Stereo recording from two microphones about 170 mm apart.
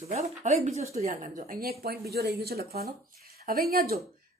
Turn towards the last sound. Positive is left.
turn(degrees=-60)  # may be behind; listen again after turning